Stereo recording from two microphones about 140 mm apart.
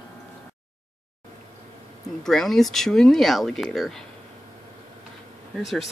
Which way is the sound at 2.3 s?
5° left (ahead or behind).